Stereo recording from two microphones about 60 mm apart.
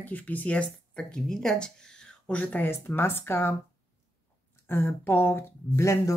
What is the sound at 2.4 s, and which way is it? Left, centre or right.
Speech, left.